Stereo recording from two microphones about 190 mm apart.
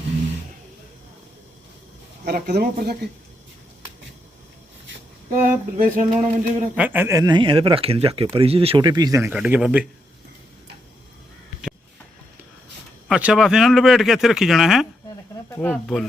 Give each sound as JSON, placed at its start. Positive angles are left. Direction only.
{"t": 2.2, "sound": "speech", "side_deg": -55}
{"t": 5.3, "sound": "a sound", "side_deg": -45}
{"t": 6.7, "sound": "speech", "side_deg": -10}
{"t": 9.3, "sound": "speech", "side_deg": -5}
{"t": 13.1, "sound": "speech", "side_deg": -5}
{"t": 15.4, "sound": "speech", "side_deg": 10}